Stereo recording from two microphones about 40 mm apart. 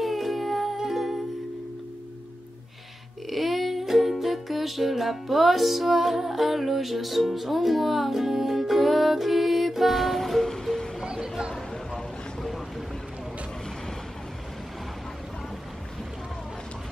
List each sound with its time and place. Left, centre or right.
0.0 s music: centre
3.3 s music: centre
11.1 s a sound: centre